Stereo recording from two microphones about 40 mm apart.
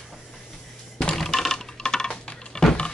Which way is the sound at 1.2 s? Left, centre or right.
Centre.